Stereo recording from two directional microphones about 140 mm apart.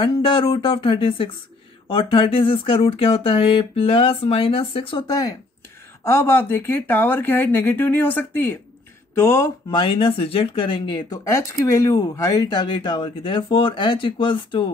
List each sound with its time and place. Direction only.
0.0 s speech: 35° left (ahead or behind)
6.0 s speech: 15° left (ahead or behind)
9.7 s speech: 35° left (ahead or behind)